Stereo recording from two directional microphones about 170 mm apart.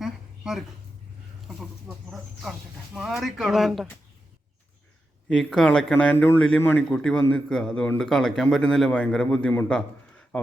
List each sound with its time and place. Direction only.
0.0 s a sound: 5° right (ahead or behind)
2.0 s a man's voice: centre (ahead or behind)
5.3 s a man's voice: centre (ahead or behind)